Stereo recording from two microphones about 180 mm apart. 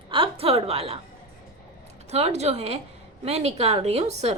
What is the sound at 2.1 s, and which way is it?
A woman's voice, 35° right (ahead or behind).